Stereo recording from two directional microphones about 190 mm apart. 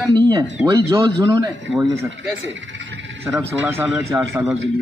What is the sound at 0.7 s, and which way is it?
Speech, 15° right (ahead or behind).